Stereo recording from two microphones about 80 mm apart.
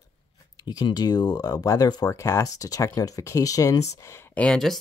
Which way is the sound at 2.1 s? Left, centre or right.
Left.